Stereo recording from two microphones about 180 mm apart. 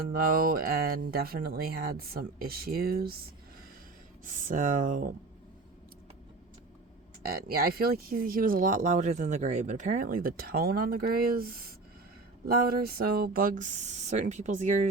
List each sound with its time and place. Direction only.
0.1 s speech: 55° right (ahead or behind)
4.4 s speech: 45° right (ahead or behind)
7.2 s speech: 55° right (ahead or behind)